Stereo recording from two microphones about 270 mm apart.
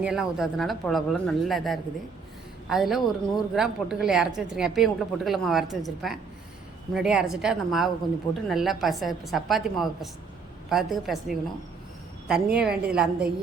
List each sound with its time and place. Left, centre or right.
0.0 s a woman's voice: centre